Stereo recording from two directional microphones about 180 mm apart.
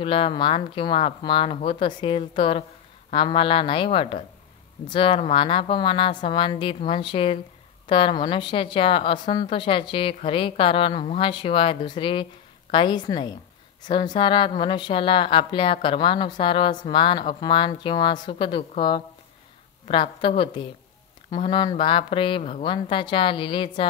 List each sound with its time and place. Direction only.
0.0 s a woman's voice: 30° left (ahead or behind)